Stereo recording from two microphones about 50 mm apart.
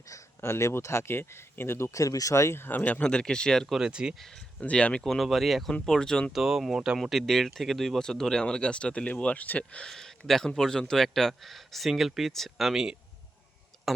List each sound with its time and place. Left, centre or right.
0.1 s speech: left
2.6 s speech: left
2.8 s speech: left
3.8 s speech: centre
4.6 s speech: left
5.0 s speech: centre
5.8 s speech: centre
6.3 s speech: centre
7.0 s speech: centre
8.0 s speech: centre
9.9 s speech: centre